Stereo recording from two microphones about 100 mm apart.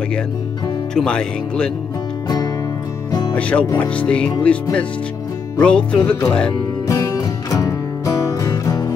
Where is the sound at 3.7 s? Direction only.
10° left (ahead or behind).